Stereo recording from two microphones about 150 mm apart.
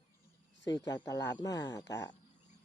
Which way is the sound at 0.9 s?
20° left (ahead or behind).